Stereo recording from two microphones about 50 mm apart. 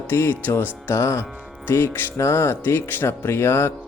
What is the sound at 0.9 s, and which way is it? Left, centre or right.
Music, left.